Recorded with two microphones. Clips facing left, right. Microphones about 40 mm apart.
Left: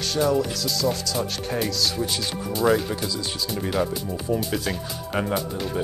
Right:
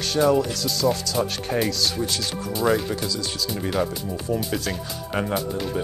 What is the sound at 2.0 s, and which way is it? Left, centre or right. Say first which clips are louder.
Speech: even; centre.